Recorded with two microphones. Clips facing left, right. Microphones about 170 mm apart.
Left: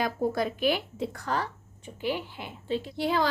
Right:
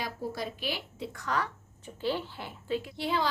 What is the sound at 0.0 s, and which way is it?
A woman's voice, 55° left (ahead or behind).